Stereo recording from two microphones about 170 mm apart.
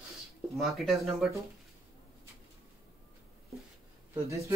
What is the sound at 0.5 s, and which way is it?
Speech, centre (ahead or behind).